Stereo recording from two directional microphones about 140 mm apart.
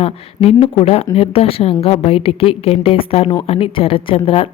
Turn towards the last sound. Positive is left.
turn(degrees=40)  # may be behind; listen again after turning